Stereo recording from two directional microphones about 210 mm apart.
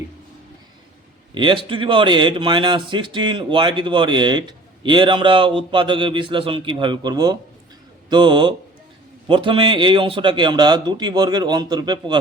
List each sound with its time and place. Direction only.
1.3 s a man's voice: 25° right (ahead or behind)